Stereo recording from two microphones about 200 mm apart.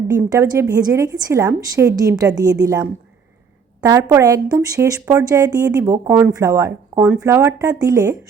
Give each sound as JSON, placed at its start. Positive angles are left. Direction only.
{"t": 0.2, "sound": "speech", "side_deg": -15}